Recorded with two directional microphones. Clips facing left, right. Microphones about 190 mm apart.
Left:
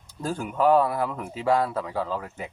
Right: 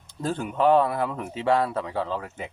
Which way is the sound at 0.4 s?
25° right (ahead or behind).